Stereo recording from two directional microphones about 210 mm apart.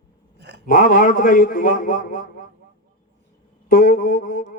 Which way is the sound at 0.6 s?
40° left (ahead or behind).